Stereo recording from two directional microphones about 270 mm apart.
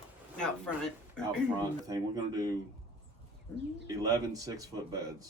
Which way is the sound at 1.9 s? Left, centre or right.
Centre.